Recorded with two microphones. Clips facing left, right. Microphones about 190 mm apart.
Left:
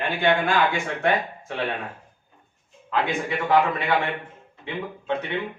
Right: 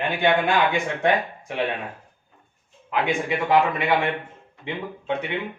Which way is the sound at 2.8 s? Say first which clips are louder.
Right 1 dB; 15° right (ahead or behind).